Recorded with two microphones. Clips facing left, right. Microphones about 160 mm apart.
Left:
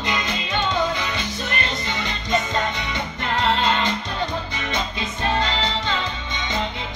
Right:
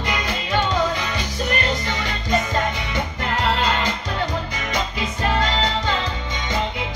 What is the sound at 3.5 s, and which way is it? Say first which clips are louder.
Music: even; 25° left (ahead or behind).